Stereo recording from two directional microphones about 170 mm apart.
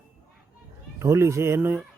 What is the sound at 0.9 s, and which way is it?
Speech, 15° right (ahead or behind).